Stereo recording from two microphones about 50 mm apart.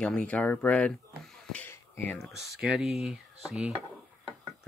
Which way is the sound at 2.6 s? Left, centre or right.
Centre.